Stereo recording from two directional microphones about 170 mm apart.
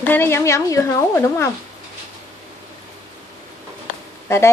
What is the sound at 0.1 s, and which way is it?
A woman's voice, 15° left (ahead or behind).